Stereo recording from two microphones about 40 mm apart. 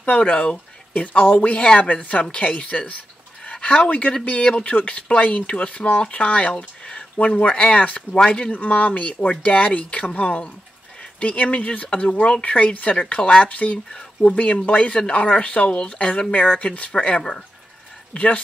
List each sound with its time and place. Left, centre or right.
0.0 s speech: left
4.2 s speech: left
4.5 s speech: left
7.8 s speech: left
12.9 s speech: left